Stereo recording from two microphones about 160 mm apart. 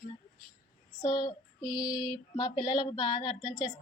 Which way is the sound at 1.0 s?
25° left (ahead or behind).